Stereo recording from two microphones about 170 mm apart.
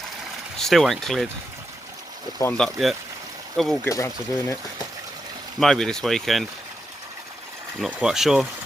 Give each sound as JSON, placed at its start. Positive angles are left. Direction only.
{"t": 0.6, "sound": "speech", "side_deg": 0}
{"t": 2.4, "sound": "speech", "side_deg": 5}
{"t": 3.8, "sound": "speech", "side_deg": 20}
{"t": 5.5, "sound": "speech", "side_deg": 0}
{"t": 7.8, "sound": "speech", "side_deg": -5}